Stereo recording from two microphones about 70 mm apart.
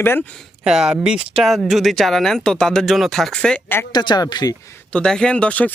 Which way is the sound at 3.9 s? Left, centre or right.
Left.